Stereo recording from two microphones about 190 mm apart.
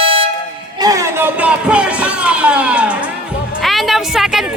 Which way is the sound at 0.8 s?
15° right (ahead or behind).